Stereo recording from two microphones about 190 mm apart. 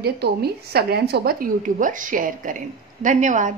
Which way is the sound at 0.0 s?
55° right (ahead or behind).